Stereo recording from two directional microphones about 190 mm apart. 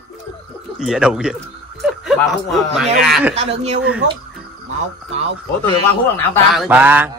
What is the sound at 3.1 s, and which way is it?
Speech, 5° right (ahead or behind).